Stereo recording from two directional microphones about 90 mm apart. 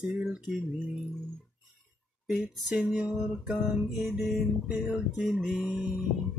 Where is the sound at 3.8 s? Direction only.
Centre (ahead or behind).